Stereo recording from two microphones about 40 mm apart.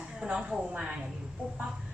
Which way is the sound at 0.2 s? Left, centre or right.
Right.